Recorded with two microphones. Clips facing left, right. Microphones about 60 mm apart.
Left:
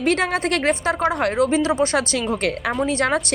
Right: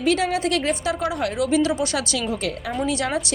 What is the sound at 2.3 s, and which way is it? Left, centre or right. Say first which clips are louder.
Speech: left 4 dB; left.